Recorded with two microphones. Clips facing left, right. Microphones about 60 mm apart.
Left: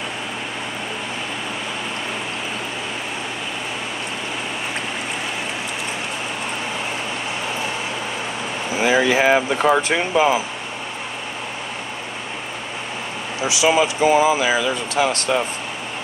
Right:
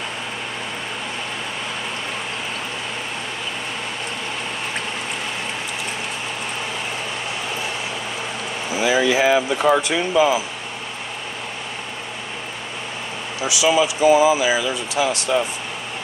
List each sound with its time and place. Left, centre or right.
8.8 s speech: left
13.4 s speech: left